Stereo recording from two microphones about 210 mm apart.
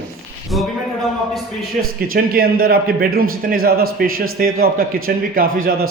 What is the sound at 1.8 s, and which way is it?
A man's voice, 45° right (ahead or behind).